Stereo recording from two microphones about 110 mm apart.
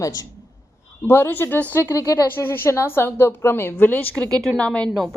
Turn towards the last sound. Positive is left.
turn(degrees=5)  # may be behind; listen again after turning